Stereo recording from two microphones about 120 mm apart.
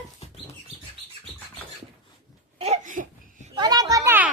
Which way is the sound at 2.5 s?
65° right (ahead or behind).